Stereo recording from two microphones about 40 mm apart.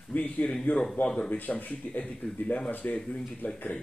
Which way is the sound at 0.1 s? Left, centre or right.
Left.